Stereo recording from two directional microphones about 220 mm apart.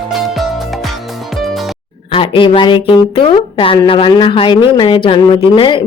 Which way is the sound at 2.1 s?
20° left (ahead or behind).